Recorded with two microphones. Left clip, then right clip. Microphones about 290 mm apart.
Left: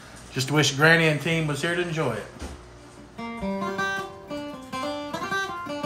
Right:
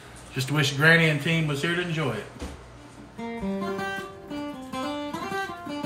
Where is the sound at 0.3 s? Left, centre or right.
Left.